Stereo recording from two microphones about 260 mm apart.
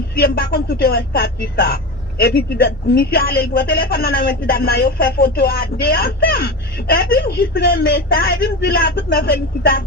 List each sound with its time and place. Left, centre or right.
0.2 s speech: left